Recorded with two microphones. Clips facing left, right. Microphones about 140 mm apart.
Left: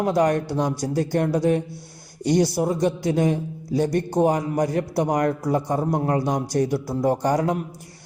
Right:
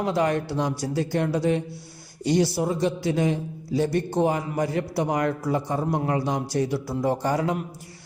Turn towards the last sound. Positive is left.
turn(degrees=45)  # may be behind; listen again after turning